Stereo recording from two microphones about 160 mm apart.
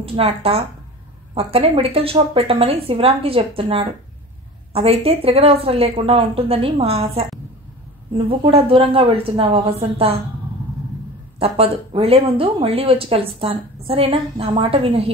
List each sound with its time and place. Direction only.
0.0 s speech: 35° right (ahead or behind)
8.3 s speech: 35° right (ahead or behind)
11.3 s speech: 35° right (ahead or behind)